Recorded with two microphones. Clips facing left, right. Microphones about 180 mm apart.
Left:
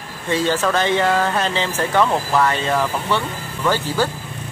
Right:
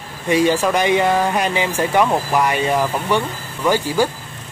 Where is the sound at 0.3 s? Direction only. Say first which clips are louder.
Right 3 dB; 15° right (ahead or behind).